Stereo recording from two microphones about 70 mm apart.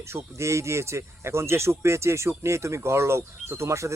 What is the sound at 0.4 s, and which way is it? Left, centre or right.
Speech, right.